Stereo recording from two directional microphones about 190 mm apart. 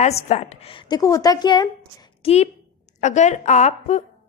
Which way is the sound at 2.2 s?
30° left (ahead or behind).